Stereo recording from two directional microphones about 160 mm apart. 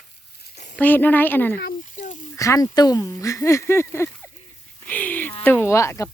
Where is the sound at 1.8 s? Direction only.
50° left (ahead or behind).